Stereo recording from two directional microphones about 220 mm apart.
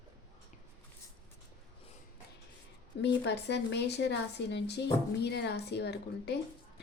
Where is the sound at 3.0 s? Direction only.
50° left (ahead or behind).